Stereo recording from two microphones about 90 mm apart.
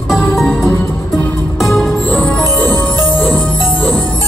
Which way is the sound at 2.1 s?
15° left (ahead or behind).